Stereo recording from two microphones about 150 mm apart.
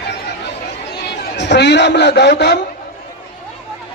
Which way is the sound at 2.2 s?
90° left.